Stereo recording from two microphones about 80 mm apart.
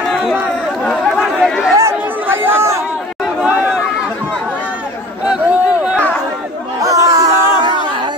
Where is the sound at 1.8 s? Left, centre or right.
Right.